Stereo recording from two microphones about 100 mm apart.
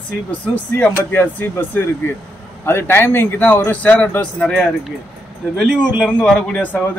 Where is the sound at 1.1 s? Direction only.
20° left (ahead or behind).